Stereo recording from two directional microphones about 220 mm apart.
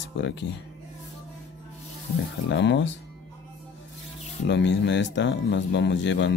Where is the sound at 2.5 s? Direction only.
55° left (ahead or behind).